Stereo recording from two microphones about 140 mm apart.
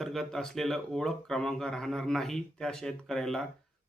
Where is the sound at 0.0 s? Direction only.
5° left (ahead or behind).